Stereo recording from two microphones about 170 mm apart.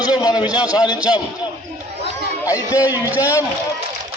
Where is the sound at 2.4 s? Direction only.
20° left (ahead or behind).